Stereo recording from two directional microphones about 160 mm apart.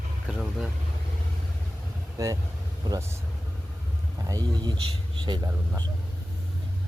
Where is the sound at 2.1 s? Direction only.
20° right (ahead or behind).